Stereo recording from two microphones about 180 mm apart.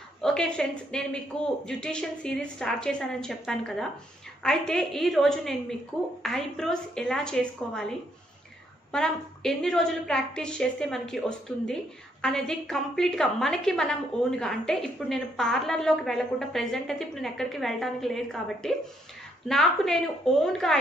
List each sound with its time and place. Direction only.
0.2 s a woman's voice: 5° left (ahead or behind)
8.9 s a woman's voice: centre (ahead or behind)